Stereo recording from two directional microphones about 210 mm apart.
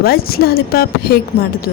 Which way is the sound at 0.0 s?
45° left (ahead or behind).